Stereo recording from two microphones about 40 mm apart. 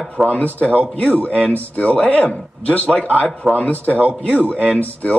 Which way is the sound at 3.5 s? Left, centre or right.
Left.